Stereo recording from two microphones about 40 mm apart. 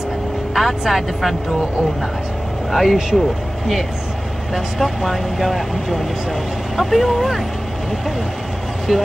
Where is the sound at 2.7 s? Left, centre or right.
Centre.